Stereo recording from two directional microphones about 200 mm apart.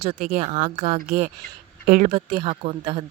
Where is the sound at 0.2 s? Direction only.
40° right (ahead or behind).